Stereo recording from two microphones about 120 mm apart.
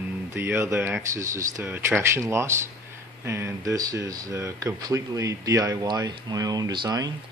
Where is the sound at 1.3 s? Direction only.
25° right (ahead or behind).